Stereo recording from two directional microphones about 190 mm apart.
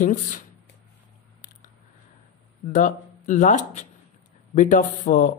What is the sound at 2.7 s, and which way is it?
Speech, 40° left (ahead or behind).